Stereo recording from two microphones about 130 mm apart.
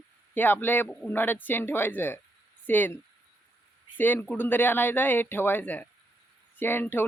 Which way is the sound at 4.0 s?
15° left (ahead or behind).